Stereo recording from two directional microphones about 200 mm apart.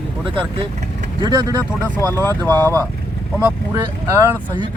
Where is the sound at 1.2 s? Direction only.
20° right (ahead or behind).